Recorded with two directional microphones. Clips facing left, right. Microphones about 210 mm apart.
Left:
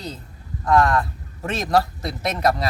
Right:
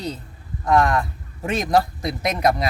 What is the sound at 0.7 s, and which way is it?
Speech, 20° right (ahead or behind).